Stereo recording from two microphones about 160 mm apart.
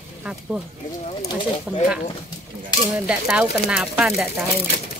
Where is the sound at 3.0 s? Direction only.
5° right (ahead or behind).